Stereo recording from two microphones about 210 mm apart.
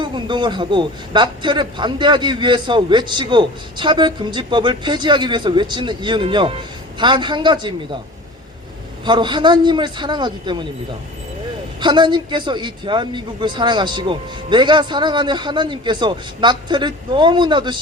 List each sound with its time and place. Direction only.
0.0 s a man's voice: 20° right (ahead or behind)
9.0 s a man's voice: 20° right (ahead or behind)
11.8 s a man's voice: 20° right (ahead or behind)